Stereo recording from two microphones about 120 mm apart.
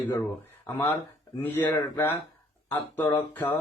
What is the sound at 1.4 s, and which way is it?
A man's voice, 15° left (ahead or behind).